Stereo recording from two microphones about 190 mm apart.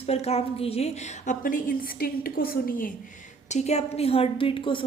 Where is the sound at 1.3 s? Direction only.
45° left (ahead or behind).